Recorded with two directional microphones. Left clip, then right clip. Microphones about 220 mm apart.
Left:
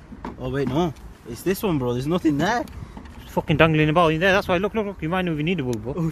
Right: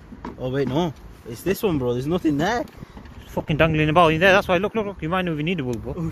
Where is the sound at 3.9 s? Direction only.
20° right (ahead or behind).